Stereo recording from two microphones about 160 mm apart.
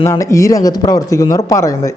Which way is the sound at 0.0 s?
20° left (ahead or behind).